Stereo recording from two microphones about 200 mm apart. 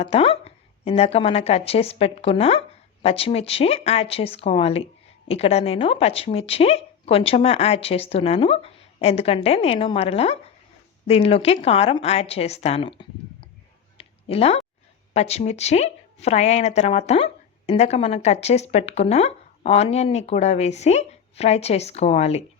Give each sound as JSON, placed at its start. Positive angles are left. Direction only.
{"t": 0.0, "sound": "speech", "side_deg": 30}
{"t": 14.0, "sound": "a sound", "side_deg": 30}
{"t": 15.1, "sound": "speech", "side_deg": 30}